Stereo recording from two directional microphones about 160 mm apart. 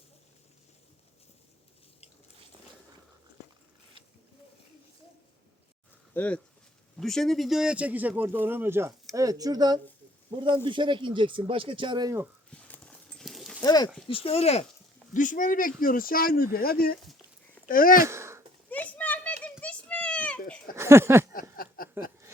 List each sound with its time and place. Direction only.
6.1 s speech: 10° left (ahead or behind); by 12.2 s 25° right (ahead or behind)
12.5 s clip-clop: 10° left (ahead or behind)
13.7 s speech: 25° left (ahead or behind)
14.1 s speech: 35° left (ahead or behind)
15.1 s speech: 55° left (ahead or behind)
18.0 s a sound: 15° right (ahead or behind)
18.7 s a sound: 10° left (ahead or behind)
19.6 s children playing: 5° left (ahead or behind)
20.7 s speech: 15° right (ahead or behind)
21.5 s a sound: 65° left (ahead or behind)